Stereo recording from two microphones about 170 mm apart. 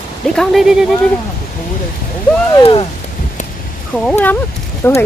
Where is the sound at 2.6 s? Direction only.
35° left (ahead or behind).